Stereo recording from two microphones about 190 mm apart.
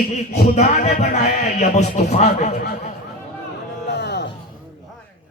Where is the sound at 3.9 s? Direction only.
65° left (ahead or behind).